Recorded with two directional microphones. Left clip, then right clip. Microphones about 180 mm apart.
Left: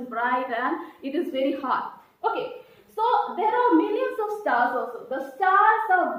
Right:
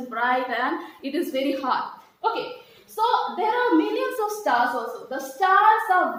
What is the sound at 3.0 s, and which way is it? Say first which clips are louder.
A woman's voice: even; 15° right (ahead or behind).